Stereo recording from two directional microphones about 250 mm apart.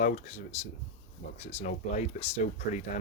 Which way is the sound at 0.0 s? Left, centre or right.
Left.